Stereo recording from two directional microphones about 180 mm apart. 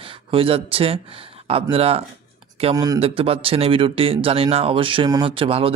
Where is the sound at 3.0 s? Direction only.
30° right (ahead or behind).